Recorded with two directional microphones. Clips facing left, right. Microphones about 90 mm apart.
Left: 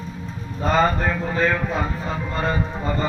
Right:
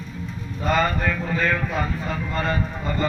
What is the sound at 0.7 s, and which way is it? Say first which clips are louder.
Speech: left 4 dB; 25° left (ahead or behind).